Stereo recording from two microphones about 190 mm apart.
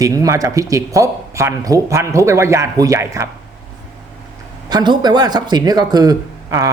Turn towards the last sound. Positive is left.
turn(degrees=-20)  # may be behind; listen again after turning